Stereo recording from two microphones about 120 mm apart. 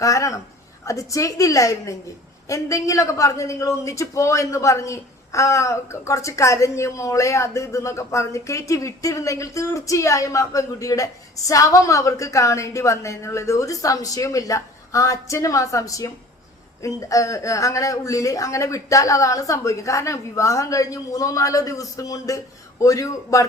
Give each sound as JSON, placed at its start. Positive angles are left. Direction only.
{"t": 0.0, "sound": "a woman's voice", "side_deg": 25}